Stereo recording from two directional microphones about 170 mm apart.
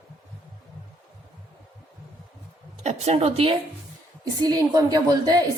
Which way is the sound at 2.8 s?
40° right (ahead or behind).